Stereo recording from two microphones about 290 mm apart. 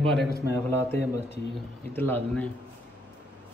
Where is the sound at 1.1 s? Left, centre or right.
Left.